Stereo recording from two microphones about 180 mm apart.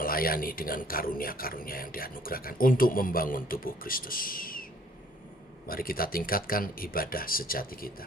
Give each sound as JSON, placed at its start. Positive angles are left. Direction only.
{"t": 0.0, "sound": "speech", "side_deg": 55}
{"t": 5.6, "sound": "speech", "side_deg": 55}